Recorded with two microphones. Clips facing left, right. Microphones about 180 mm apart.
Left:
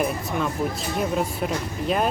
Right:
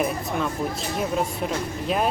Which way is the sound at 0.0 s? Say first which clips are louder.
Even; centre (ahead or behind).